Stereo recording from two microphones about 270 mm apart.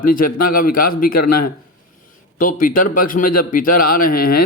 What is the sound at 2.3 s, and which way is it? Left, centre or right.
A man's voice, left.